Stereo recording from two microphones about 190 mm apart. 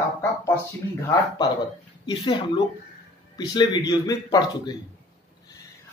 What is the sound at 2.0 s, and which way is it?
A man's voice, 25° left (ahead or behind).